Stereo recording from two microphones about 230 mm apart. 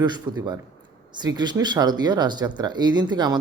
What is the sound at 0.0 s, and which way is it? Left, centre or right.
Speech, centre.